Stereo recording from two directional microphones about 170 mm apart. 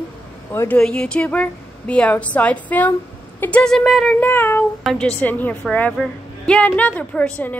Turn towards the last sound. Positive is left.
turn(degrees=10)  # may be behind; listen again after turning